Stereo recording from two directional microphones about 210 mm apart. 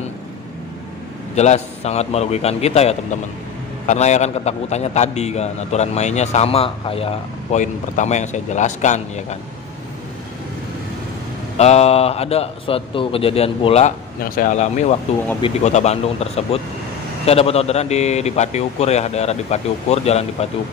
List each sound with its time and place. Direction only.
1.3 s a man's voice: 30° left (ahead or behind)
11.5 s a man's voice: 30° left (ahead or behind)